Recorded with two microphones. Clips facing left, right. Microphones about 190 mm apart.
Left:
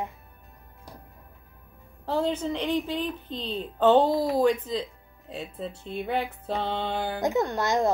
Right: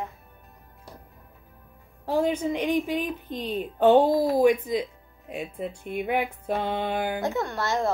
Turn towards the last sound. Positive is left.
turn(degrees=15)  # may be behind; listen again after turning